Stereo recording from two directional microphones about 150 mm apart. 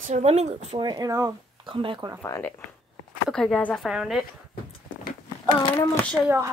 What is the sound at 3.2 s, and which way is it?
Speech, 5° left (ahead or behind).